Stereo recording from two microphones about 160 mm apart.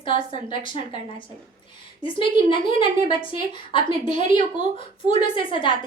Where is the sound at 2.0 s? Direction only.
30° left (ahead or behind).